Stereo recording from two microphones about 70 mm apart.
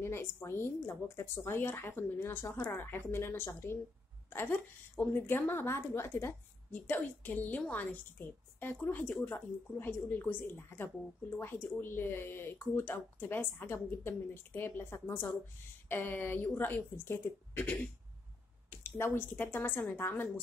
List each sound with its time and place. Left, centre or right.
0.0 s a woman's voice: left
18.8 s a woman's voice: left